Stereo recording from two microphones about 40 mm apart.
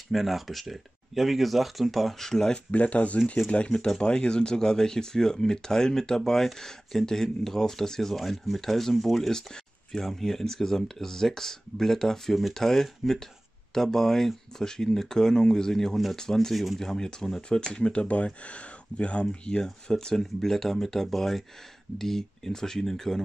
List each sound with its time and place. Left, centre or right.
0.1 s speech: centre
2.2 s speech: centre
2.7 s speech: left
4.0 s speech: left
16.3 s speech: centre
16.8 s speech: centre
20.2 s speech: centre